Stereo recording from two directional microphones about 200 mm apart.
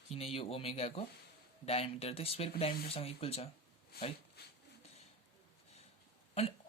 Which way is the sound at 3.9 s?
50° left (ahead or behind).